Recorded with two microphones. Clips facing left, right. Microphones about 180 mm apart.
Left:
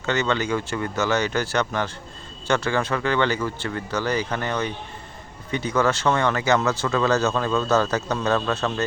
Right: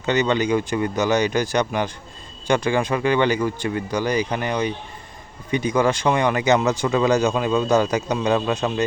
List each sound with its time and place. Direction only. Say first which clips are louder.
0.0 s speech: right 4 dB; 15° right (ahead or behind)